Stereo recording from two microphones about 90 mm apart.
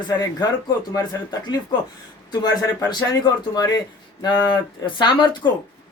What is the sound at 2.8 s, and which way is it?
Speech, 50° left (ahead or behind).